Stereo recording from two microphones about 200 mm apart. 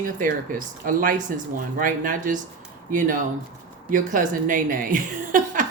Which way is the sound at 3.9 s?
40° right (ahead or behind).